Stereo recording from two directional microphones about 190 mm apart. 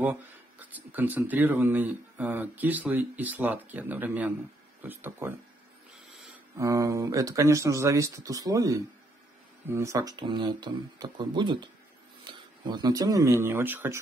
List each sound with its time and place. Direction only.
0.0 s speech: 10° right (ahead or behind)
6.5 s speech: 15° right (ahead or behind)